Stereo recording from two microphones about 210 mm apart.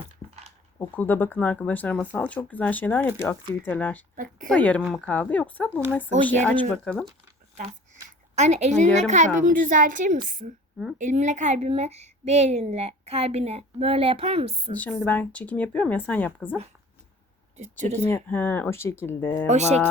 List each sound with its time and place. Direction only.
0.8 s speech: 10° left (ahead or behind)
4.1 s a woman's voice: 40° right (ahead or behind)
4.4 s speech: 5° left (ahead or behind)
8.4 s a woman's voice: 30° right (ahead or behind)
14.8 s speech: 10° left (ahead or behind)
17.6 s a woman's voice: 35° right (ahead or behind)
18.1 s speech: 10° left (ahead or behind)
19.5 s a woman's voice: 35° right (ahead or behind)